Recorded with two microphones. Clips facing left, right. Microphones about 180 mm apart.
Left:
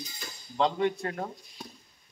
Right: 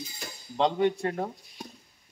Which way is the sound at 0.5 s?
25° right (ahead or behind).